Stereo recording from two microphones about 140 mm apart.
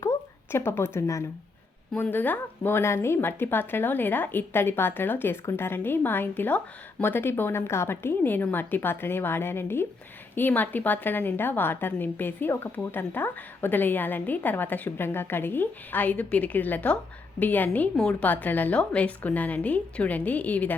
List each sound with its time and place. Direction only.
0.5 s a woman's voice: 20° left (ahead or behind)